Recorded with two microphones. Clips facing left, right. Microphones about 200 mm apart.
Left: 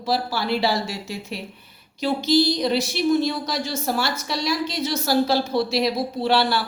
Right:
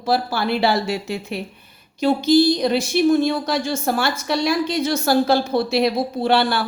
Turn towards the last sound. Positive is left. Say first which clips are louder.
# right 2 dB
turn(degrees=-55)  # may be behind; listen again after turning